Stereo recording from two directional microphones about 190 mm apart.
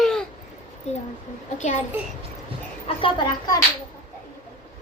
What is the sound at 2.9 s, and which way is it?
Speech, 25° left (ahead or behind).